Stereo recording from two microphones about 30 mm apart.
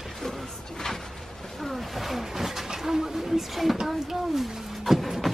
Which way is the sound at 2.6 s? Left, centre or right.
Centre.